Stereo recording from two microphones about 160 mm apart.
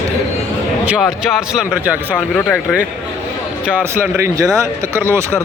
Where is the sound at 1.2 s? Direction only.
Centre (ahead or behind).